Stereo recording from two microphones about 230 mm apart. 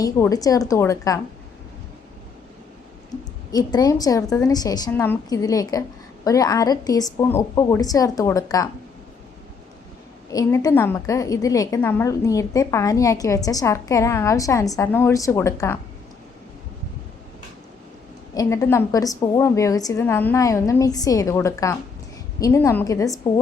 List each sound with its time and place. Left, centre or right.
0.0 s a woman's voice: centre
3.5 s a woman's voice: centre
10.3 s a woman's voice: centre
18.3 s a woman's voice: centre